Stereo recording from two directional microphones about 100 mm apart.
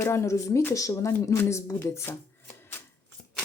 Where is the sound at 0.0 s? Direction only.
25° left (ahead or behind).